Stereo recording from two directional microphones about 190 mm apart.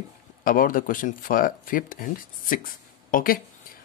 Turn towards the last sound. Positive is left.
turn(degrees=50)  # may be behind; listen again after turning